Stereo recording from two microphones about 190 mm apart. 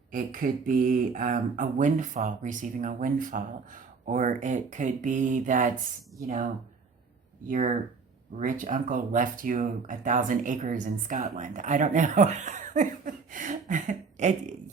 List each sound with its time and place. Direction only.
0.1 s speech: 45° right (ahead or behind)